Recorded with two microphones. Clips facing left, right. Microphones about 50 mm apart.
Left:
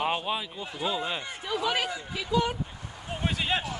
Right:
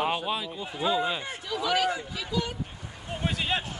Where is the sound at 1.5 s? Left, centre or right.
Left.